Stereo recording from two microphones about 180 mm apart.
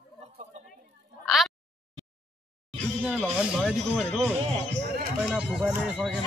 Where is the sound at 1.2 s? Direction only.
Centre (ahead or behind).